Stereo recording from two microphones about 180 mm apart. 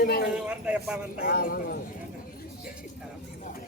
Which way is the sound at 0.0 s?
60° left (ahead or behind).